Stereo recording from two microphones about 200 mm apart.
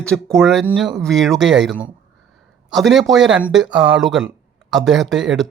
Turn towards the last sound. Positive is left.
turn(degrees=0)  # may be behind; listen again after turning